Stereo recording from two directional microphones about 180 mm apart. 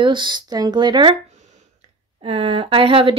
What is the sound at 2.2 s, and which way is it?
Speech, 30° right (ahead or behind).